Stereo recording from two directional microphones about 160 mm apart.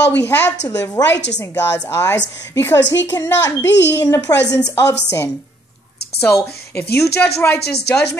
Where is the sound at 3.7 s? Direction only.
90° left.